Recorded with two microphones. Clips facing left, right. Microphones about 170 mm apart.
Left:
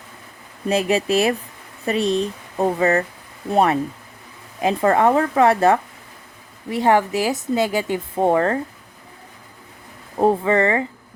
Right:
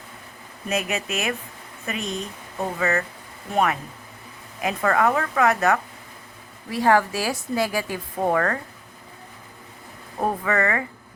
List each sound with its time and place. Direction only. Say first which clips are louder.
0.7 s speech: left 8 dB; 30° left (ahead or behind)
10.2 s speech: left 7 dB; 25° left (ahead or behind)